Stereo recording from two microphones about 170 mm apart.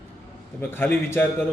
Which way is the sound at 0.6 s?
10° left (ahead or behind).